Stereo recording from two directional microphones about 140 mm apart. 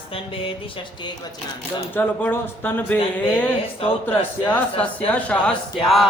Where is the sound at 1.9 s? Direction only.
15° left (ahead or behind).